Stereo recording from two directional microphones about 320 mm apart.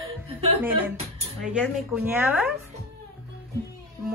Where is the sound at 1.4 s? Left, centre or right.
Centre.